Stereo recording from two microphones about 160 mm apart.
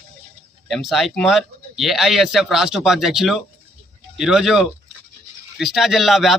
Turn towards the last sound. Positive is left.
turn(degrees=0)  # may be behind; listen again after turning